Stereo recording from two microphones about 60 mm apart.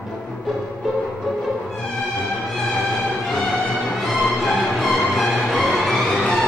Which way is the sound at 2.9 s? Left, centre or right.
Centre.